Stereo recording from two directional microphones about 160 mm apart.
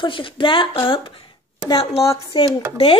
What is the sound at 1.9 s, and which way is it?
Speech, 20° left (ahead or behind).